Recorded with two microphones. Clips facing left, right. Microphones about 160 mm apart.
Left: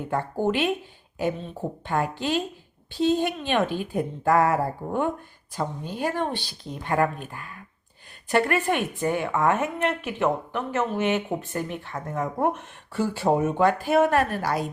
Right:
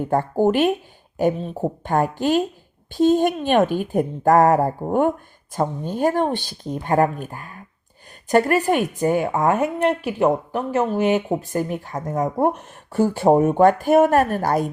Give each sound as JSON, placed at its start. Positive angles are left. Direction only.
{"t": 0.1, "sound": "speech", "side_deg": -45}